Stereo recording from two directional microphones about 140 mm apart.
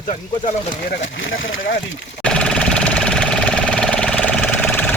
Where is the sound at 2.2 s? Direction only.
5° left (ahead or behind).